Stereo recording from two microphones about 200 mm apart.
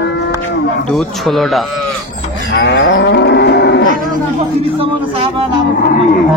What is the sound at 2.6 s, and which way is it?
Moo, 60° left (ahead or behind).